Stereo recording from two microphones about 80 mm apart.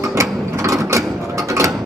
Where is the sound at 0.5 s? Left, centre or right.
Right.